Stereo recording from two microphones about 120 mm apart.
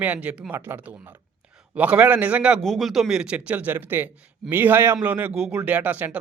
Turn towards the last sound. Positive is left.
turn(degrees=-15)  # may be behind; listen again after turning